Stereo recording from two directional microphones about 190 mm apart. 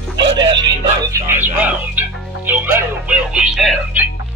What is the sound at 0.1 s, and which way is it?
Music, 25° right (ahead or behind).